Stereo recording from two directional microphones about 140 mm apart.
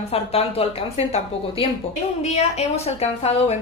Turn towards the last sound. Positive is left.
turn(degrees=50)  # may be behind; listen again after turning